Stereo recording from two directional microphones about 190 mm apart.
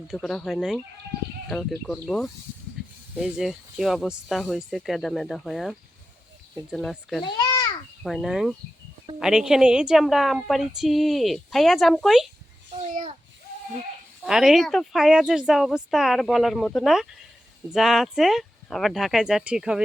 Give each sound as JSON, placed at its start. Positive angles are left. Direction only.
{"t": 0.1, "sound": "speech", "side_deg": 5}
{"t": 7.2, "sound": "a sound", "side_deg": 20}
{"t": 8.0, "sound": "speech", "side_deg": 0}
{"t": 14.3, "sound": "speech", "side_deg": 0}